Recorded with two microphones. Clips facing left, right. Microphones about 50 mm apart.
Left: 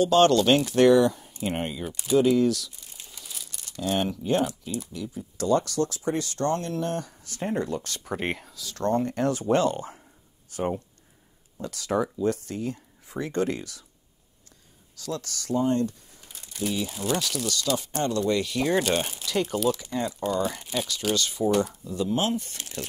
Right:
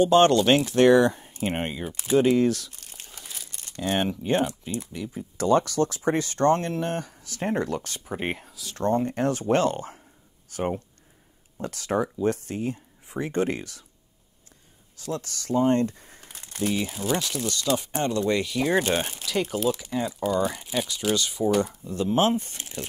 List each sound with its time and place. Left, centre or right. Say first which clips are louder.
0.0 s speech: right 1 dB; right
0.7 s speech: right 1 dB; right
7.3 s speech: right 2 dB; right
8.0 s speech: even; centre
8.7 s speech: right 1 dB; right
9.4 s speech: even; right
15.0 s speech: right 1 dB; right
17.1 s speech: even; right
19.7 s speech: right 1 dB; centre
21.8 s speech: right 4 dB; right